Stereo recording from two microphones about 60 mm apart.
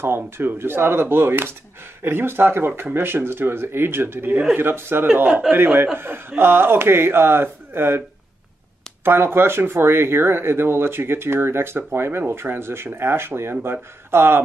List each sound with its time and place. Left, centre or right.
0.0 s speech: right
5.1 s a man's voice: right
9.0 s speech: right